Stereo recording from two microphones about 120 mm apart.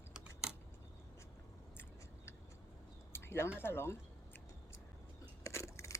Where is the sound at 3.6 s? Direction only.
20° left (ahead or behind).